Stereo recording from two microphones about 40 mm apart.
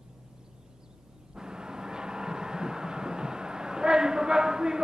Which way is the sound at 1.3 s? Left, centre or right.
Centre.